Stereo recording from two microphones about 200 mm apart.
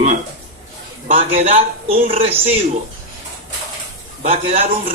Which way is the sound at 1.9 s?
45° right (ahead or behind).